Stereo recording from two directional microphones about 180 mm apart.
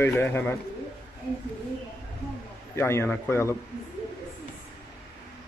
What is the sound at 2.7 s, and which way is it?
Speech, 15° left (ahead or behind).